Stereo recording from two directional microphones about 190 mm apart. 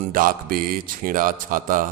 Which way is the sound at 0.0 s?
45° right (ahead or behind).